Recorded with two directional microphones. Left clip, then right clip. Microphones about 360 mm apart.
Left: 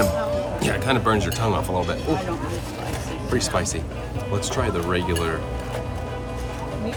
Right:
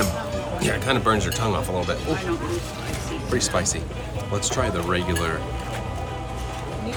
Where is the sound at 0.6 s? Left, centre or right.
Centre.